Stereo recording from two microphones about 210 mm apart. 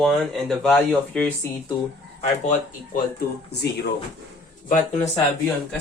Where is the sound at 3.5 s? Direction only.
50° left (ahead or behind).